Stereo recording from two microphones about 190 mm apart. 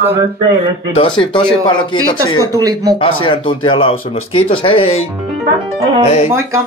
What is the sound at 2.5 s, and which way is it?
Speech, 20° right (ahead or behind).